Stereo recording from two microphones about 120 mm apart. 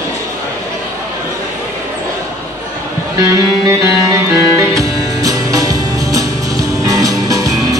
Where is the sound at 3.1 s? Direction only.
25° right (ahead or behind).